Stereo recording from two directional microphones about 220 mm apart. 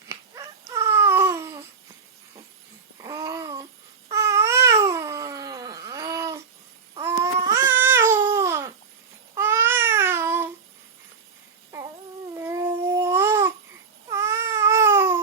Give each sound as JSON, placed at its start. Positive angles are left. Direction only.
{"t": 0.7, "sound": "a sound", "side_deg": -15}
{"t": 3.0, "sound": "babbling", "side_deg": -20}
{"t": 4.1, "sound": "cat", "side_deg": -15}
{"t": 7.0, "sound": "babbling", "side_deg": -15}
{"t": 11.7, "sound": "a sound", "side_deg": -15}
{"t": 12.3, "sound": "babbling", "side_deg": -15}
{"t": 14.1, "sound": "baby cry", "side_deg": -10}